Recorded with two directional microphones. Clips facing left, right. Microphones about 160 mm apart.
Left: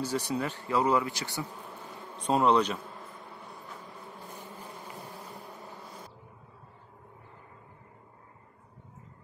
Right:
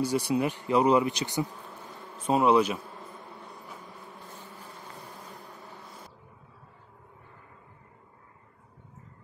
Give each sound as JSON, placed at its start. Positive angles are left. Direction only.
{"t": 0.0, "sound": "speech", "side_deg": -10}
{"t": 2.1, "sound": "speech", "side_deg": -5}
{"t": 4.3, "sound": "bee", "side_deg": 15}